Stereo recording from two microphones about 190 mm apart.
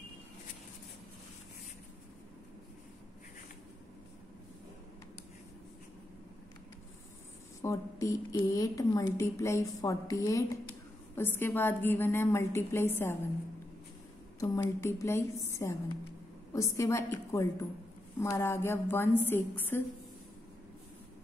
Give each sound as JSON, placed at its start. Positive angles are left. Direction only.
{"t": 7.6, "sound": "a woman's voice", "side_deg": 15}
{"t": 14.4, "sound": "a woman's voice", "side_deg": 15}